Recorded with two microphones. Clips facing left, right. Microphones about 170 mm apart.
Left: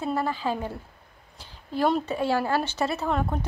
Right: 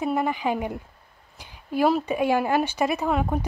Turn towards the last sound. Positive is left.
turn(degrees=-10)  # may be behind; listen again after turning